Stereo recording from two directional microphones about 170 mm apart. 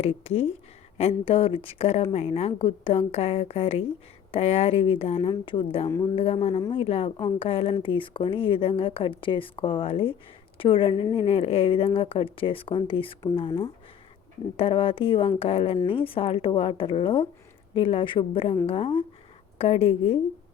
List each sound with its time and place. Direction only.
0.0 s speech: 35° left (ahead or behind)
14.5 s speech: 30° left (ahead or behind)